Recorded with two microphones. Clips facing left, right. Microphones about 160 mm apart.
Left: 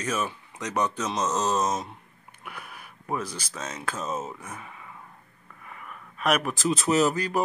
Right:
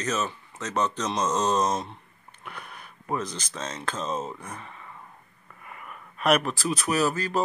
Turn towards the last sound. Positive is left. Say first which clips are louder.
# left 2 dB
turn(degrees=15)  # may be behind; listen again after turning